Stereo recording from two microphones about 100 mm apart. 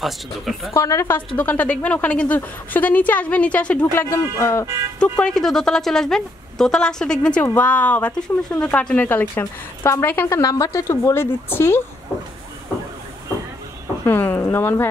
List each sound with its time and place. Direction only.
0.0 s a woman's voice: centre (ahead or behind)
0.7 s a woman's voice: 30° left (ahead or behind)
1.1 s speech: 15° left (ahead or behind)
3.8 s speech: 25° left (ahead or behind)
5.0 s a woman's voice: 10° left (ahead or behind)
10.4 s a woman's voice: 35° left (ahead or behind)
14.0 s speech: 20° left (ahead or behind)